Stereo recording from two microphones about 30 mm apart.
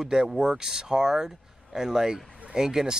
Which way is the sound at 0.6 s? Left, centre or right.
Right.